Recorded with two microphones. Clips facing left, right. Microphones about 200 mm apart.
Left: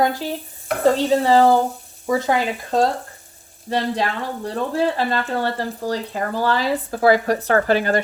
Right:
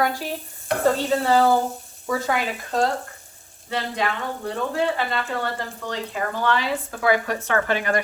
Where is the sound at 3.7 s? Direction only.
35° left (ahead or behind).